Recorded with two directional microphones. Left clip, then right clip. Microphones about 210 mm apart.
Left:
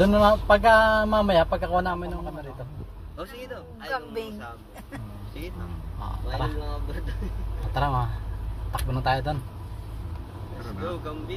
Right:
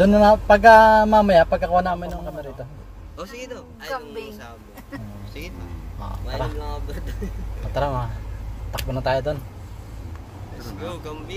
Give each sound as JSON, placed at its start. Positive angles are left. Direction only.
{"t": 0.0, "sound": "speech", "side_deg": -25}
{"t": 3.2, "sound": "speech", "side_deg": -50}
{"t": 7.7, "sound": "a man's voice", "side_deg": -20}
{"t": 9.0, "sound": "speech", "side_deg": -20}
{"t": 10.9, "sound": "speech", "side_deg": -55}